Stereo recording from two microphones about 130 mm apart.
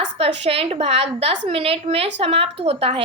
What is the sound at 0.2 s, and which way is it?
A woman's voice, 50° right (ahead or behind).